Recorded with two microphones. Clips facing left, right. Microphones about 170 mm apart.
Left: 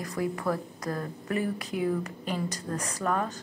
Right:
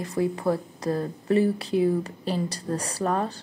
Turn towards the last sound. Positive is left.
turn(degrees=-30)  # may be behind; listen again after turning